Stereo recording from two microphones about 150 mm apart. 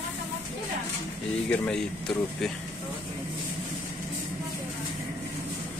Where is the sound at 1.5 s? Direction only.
5° left (ahead or behind).